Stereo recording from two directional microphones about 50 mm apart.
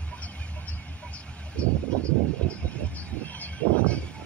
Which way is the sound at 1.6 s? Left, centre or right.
Left.